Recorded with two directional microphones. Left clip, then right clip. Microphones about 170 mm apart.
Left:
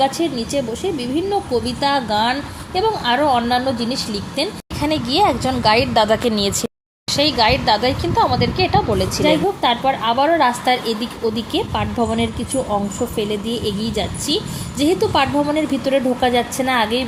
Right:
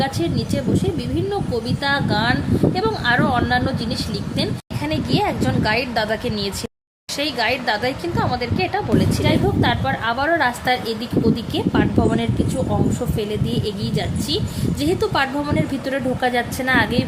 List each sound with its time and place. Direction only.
0.0 s a woman's voice: 10° left (ahead or behind)